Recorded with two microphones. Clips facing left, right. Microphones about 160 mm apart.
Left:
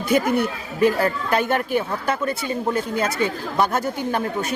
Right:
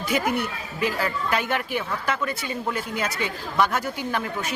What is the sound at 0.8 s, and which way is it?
Speech, 50° left (ahead or behind).